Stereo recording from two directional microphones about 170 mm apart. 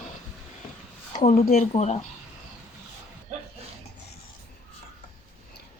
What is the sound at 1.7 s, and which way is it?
Speech, 40° left (ahead or behind).